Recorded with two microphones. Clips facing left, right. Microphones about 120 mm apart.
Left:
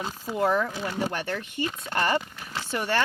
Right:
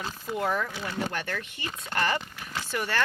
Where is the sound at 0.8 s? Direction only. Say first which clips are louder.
Left 3 dB; 25° left (ahead or behind).